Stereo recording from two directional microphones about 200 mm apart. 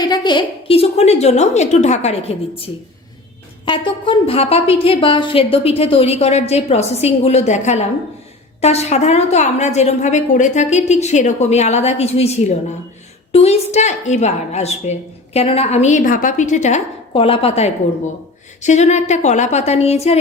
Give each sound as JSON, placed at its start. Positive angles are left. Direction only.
{"t": 0.0, "sound": "a woman's voice", "side_deg": 20}
{"t": 3.7, "sound": "a woman's voice", "side_deg": 25}